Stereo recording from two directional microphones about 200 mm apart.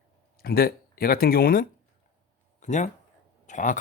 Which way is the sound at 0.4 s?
50° left (ahead or behind).